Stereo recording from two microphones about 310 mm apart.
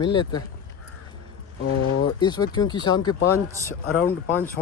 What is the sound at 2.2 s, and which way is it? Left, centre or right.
Speech, centre.